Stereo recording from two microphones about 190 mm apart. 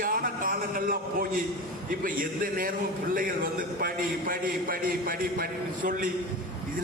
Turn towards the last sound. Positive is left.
turn(degrees=-45)  # may be behind; listen again after turning